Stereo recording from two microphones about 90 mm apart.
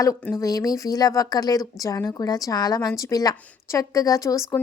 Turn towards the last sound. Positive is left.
turn(degrees=40)  # may be behind; listen again after turning